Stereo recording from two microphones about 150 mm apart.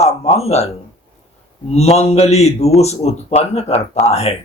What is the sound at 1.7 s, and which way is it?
Speech, 45° left (ahead or behind).